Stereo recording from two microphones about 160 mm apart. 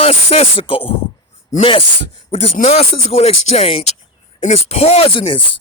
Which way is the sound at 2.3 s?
40° left (ahead or behind).